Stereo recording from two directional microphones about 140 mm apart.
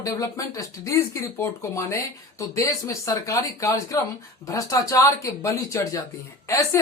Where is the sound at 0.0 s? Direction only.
25° left (ahead or behind).